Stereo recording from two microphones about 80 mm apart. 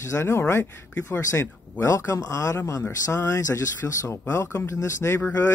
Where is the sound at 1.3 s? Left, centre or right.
Left.